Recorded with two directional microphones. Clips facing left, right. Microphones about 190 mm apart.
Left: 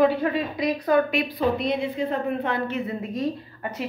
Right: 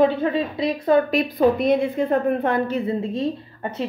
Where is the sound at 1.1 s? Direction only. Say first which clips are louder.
Right 5 dB; 45° right (ahead or behind).